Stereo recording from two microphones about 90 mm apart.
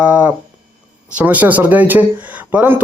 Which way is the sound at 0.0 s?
15° right (ahead or behind).